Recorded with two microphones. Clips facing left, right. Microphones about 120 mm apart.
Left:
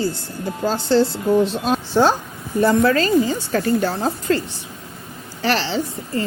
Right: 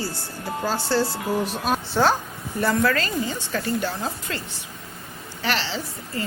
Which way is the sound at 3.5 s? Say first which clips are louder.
Left 6 dB; 45° left (ahead or behind).